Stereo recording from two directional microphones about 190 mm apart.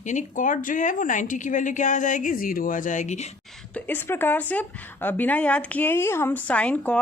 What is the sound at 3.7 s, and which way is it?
A woman's voice, 10° left (ahead or behind).